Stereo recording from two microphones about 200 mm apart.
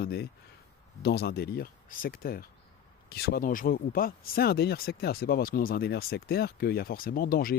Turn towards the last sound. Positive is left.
turn(degrees=45)  # may be behind; listen again after turning